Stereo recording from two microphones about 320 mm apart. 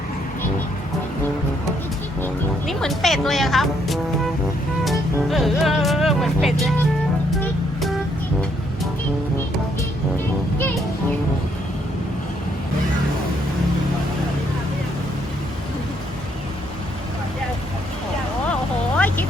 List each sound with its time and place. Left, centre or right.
2.2 s speech: centre
4.9 s music: centre
18.9 s a sound: centre